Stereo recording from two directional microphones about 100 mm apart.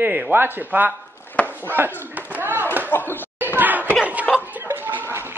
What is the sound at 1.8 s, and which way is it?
Speech, 20° right (ahead or behind).